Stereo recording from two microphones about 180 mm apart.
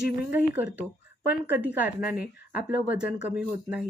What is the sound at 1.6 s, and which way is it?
Speech, 10° right (ahead or behind).